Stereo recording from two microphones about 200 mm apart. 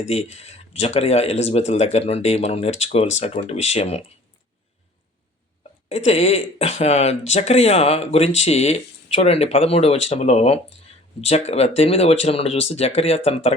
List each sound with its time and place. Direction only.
0.0 s speech: 35° left (ahead or behind)
5.9 s speech: 35° left (ahead or behind)